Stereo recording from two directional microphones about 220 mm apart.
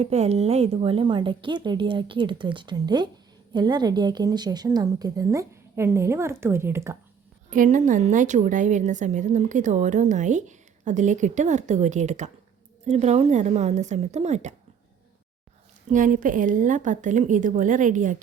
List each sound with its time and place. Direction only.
0.0 s a woman's voice: 30° right (ahead or behind); by 6.9 s 10° right (ahead or behind)
7.5 s a woman's voice: 35° right (ahead or behind)
15.9 s a woman's voice: 35° right (ahead or behind)